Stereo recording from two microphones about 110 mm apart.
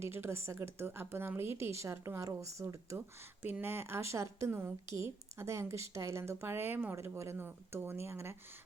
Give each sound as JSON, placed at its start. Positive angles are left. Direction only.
{"t": 0.0, "sound": "speech", "side_deg": -20}